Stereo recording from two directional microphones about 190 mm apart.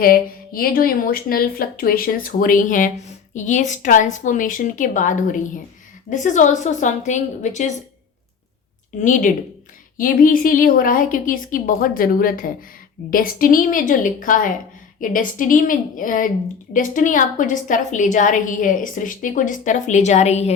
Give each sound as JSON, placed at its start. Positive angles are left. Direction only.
{"t": 0.0, "sound": "a woman's voice", "side_deg": 50}
{"t": 9.0, "sound": "a woman's voice", "side_deg": 40}